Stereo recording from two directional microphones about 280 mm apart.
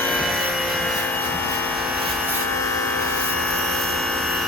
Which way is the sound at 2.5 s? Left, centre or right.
Centre.